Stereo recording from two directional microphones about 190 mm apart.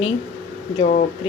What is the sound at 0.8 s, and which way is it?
Speech, 40° left (ahead or behind).